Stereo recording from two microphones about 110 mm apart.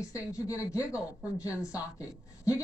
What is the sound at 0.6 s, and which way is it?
Speech, 30° left (ahead or behind).